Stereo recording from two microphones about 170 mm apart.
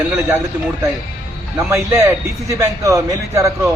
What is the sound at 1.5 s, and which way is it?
A man's voice, 15° right (ahead or behind).